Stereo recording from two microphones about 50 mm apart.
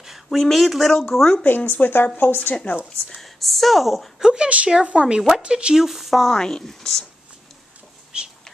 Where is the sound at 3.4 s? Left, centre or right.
Centre.